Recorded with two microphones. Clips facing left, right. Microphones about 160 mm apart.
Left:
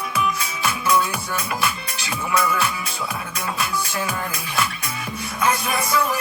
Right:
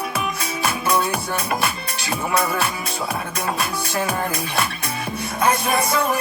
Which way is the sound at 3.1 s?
50° right (ahead or behind).